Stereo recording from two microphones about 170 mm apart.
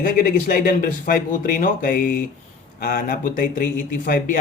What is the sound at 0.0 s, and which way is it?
Speech, 60° left (ahead or behind).